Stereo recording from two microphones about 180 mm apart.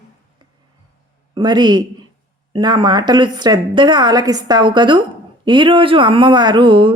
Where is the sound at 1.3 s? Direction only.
25° right (ahead or behind).